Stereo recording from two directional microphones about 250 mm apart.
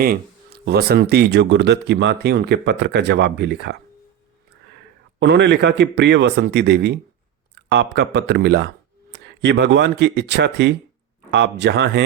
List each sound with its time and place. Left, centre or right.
0.6 s speech: right
5.2 s speech: right